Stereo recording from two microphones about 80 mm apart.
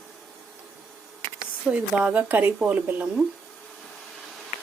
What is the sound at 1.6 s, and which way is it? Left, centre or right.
Speech, centre.